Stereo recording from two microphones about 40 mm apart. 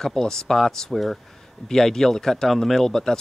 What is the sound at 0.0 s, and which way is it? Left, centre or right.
A man's voice, centre.